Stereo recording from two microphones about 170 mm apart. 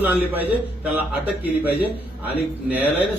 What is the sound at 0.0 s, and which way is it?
Speech, 10° right (ahead or behind).